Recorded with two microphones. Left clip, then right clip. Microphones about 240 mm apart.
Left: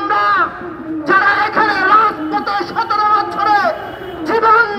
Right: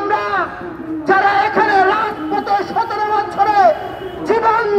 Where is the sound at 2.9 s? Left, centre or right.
Left.